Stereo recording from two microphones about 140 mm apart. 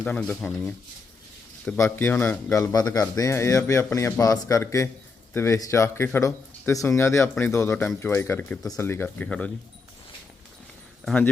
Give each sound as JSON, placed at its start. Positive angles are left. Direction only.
{"t": 0.0, "sound": "speech", "side_deg": 5}
{"t": 1.8, "sound": "speech", "side_deg": 15}
{"t": 11.0, "sound": "speech", "side_deg": 10}